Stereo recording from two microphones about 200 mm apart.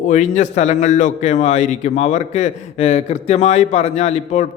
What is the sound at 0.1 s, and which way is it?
A man's voice, 35° left (ahead or behind).